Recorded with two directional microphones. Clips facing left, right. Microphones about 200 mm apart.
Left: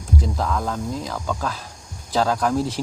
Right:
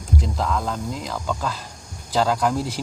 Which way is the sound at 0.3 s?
5° left (ahead or behind).